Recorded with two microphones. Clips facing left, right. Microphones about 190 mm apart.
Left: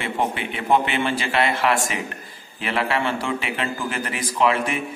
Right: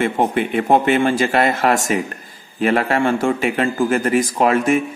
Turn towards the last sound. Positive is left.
turn(degrees=-45)  # may be behind; listen again after turning